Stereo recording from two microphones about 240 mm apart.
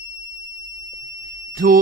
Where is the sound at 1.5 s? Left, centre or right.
Right.